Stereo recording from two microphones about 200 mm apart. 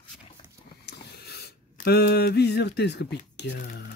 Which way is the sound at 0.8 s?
55° left (ahead or behind).